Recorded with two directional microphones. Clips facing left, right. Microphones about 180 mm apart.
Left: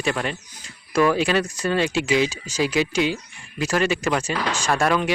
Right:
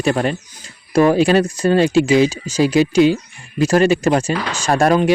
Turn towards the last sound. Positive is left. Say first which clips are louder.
# right 7 dB
turn(degrees=-40)  # may be behind; listen again after turning